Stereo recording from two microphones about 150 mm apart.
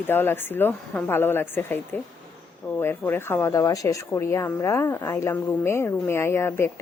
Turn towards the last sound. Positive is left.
turn(degrees=15)  # may be behind; listen again after turning